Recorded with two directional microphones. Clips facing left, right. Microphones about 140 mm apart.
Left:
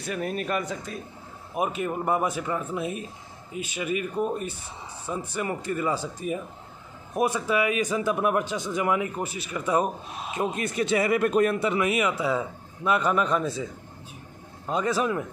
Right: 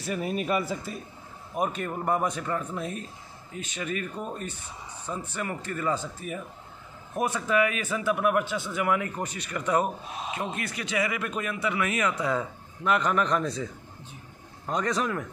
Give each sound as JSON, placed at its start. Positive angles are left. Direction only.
{"t": 0.0, "sound": "speech", "side_deg": 0}
{"t": 1.5, "sound": "speech", "side_deg": 10}
{"t": 9.2, "sound": "speech", "side_deg": 5}
{"t": 11.8, "sound": "speech", "side_deg": 10}
{"t": 14.7, "sound": "speech", "side_deg": 5}